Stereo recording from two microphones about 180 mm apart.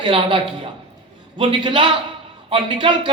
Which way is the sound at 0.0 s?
30° right (ahead or behind).